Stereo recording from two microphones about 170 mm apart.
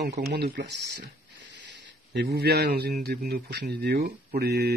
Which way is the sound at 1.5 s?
90° right.